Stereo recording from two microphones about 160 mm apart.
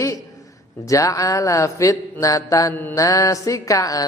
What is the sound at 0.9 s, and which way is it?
A man's voice, 20° left (ahead or behind).